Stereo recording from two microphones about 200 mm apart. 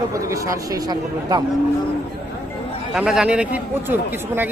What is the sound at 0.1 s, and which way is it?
Speech, 15° right (ahead or behind).